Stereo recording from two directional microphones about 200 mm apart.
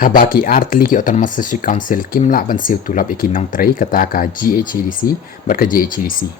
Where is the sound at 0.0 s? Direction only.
45° left (ahead or behind).